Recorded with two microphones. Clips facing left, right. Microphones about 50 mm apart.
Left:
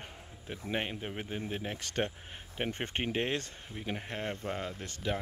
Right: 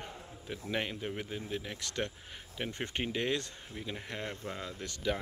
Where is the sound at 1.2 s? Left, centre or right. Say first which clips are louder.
Left 3 dB; left.